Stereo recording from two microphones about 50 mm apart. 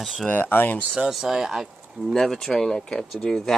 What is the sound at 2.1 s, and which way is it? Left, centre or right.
Speech, centre.